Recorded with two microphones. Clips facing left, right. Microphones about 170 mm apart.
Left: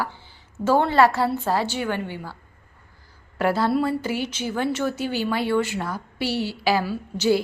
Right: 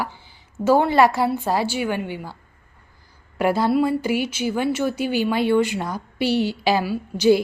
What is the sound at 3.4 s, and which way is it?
A woman's voice, 15° right (ahead or behind).